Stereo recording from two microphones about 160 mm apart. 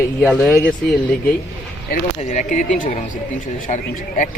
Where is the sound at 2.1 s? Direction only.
50° left (ahead or behind).